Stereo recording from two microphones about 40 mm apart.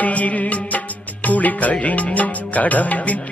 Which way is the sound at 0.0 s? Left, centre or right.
Left.